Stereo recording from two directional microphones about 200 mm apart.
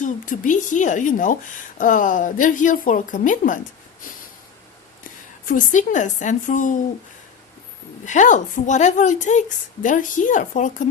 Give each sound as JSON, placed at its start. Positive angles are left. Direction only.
{"t": 0.0, "sound": "a woman's voice", "side_deg": 40}
{"t": 5.5, "sound": "a woman's voice", "side_deg": 40}
{"t": 8.0, "sound": "a woman's voice", "side_deg": 40}